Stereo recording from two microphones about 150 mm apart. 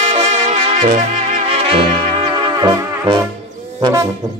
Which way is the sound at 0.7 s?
55° right (ahead or behind).